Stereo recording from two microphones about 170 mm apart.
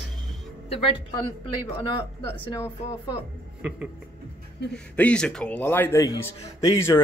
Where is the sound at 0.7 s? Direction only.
35° left (ahead or behind).